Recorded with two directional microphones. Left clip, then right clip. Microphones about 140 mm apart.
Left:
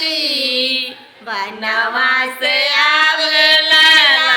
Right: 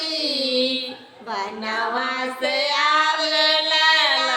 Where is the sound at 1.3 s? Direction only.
20° right (ahead or behind).